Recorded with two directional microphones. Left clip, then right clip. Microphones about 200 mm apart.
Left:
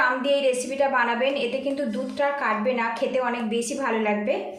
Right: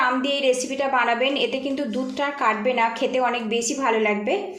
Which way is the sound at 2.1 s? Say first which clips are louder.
Right 1 dB; 40° right (ahead or behind).